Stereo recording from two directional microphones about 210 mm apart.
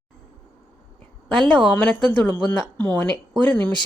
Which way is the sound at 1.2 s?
5° left (ahead or behind).